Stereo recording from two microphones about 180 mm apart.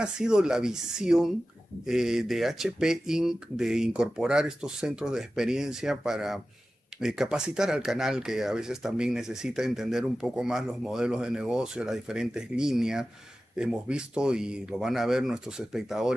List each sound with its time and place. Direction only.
0.0 s speech: 5° right (ahead or behind)